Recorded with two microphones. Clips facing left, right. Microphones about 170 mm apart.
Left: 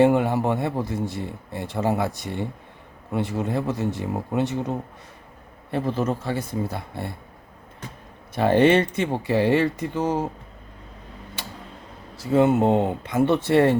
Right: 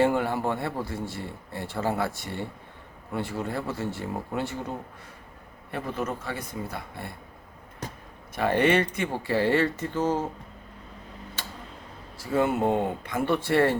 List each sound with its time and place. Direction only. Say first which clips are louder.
0.0 s speech: left 5 dB; 20° left (ahead or behind)
8.4 s speech: left 5 dB; 25° left (ahead or behind)
12.1 s speech: left 6 dB; 20° left (ahead or behind)